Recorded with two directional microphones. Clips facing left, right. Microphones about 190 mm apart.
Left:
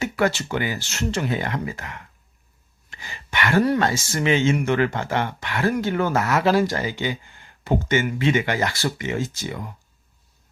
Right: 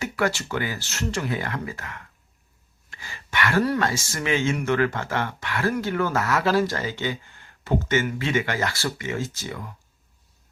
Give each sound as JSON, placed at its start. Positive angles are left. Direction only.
{"t": 0.0, "sound": "speech", "side_deg": 20}